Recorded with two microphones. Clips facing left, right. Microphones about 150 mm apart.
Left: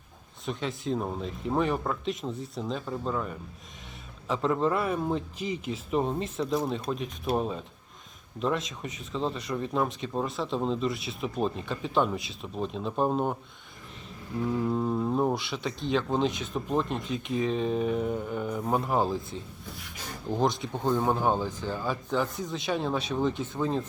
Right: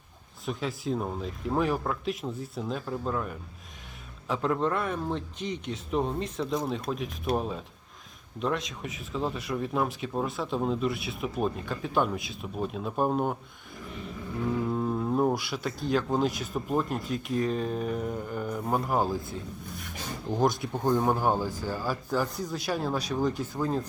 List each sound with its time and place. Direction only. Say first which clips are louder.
0.4 s speech: even; centre (ahead or behind)
14.7 s speech: left 1 dB; centre (ahead or behind)
20.4 s speech: right 1 dB; 5° right (ahead or behind)
21.4 s speech: even; 20° left (ahead or behind)
21.7 s speech: left 1 dB; 5° right (ahead or behind)